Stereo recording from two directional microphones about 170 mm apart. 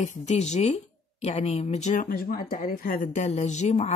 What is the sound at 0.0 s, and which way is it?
Speech, 45° left (ahead or behind).